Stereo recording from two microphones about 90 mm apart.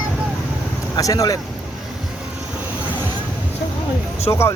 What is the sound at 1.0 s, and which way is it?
Speech, 40° left (ahead or behind).